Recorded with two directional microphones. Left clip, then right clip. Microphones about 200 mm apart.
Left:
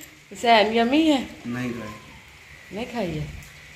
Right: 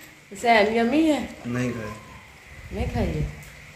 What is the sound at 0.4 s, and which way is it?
Speech, 25° left (ahead or behind).